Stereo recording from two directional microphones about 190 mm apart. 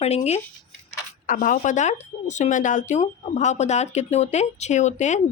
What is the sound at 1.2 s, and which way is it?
Speech, 45° left (ahead or behind).